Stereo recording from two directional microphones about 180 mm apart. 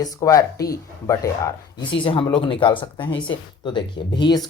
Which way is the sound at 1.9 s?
30° left (ahead or behind).